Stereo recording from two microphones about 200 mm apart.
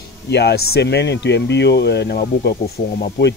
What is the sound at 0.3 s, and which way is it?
Speech, 55° left (ahead or behind).